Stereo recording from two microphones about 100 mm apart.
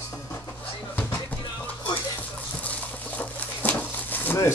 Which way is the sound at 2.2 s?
15° left (ahead or behind).